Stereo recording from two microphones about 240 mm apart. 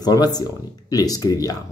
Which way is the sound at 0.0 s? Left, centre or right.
Centre.